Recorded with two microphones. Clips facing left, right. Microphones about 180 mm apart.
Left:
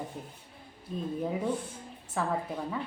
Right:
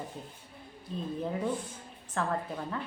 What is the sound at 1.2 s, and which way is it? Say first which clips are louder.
Speech: left 1 dB; 10° left (ahead or behind).